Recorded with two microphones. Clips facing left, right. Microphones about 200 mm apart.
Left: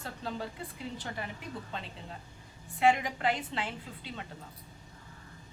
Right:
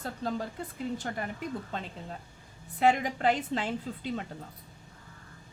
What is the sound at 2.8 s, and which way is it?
A woman's voice, 40° right (ahead or behind).